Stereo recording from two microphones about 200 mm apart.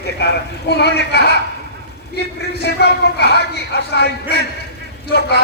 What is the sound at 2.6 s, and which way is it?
A man's voice, 55° left (ahead or behind).